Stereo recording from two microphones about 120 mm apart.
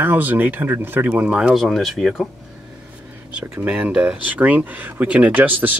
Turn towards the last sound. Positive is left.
turn(degrees=-15)  # may be behind; listen again after turning